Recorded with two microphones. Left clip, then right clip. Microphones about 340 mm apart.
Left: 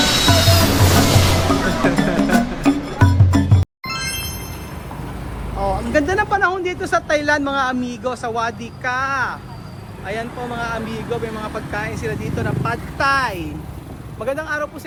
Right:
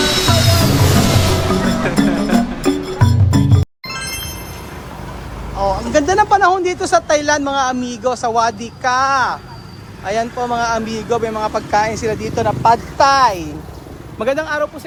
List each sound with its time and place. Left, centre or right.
0.0 s music: centre
5.5 s speech: centre
14.2 s a man's voice: right